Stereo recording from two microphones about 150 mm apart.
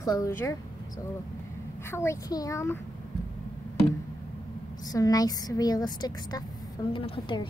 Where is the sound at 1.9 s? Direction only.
20° left (ahead or behind).